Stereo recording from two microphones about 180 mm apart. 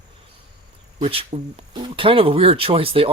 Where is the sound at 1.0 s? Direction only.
30° right (ahead or behind).